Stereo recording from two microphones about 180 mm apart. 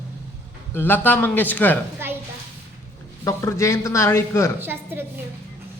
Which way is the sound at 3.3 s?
15° left (ahead or behind).